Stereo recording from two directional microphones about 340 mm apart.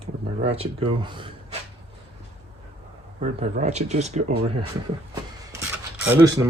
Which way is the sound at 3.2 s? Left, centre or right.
Centre.